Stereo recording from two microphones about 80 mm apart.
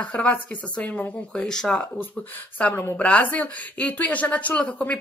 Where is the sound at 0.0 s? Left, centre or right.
Centre.